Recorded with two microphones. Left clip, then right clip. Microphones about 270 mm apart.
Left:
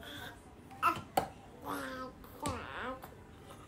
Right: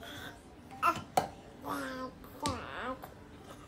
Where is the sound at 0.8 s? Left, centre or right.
Centre.